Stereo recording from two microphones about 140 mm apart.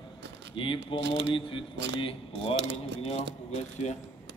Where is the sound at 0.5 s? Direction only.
35° left (ahead or behind).